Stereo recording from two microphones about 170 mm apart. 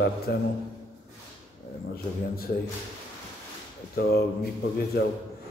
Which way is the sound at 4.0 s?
65° left (ahead or behind).